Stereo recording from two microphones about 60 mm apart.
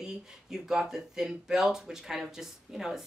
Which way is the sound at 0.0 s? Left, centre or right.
Centre.